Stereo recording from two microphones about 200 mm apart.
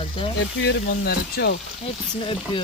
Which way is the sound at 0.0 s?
25° left (ahead or behind).